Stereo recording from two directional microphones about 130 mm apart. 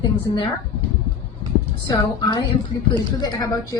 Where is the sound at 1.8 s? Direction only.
30° left (ahead or behind).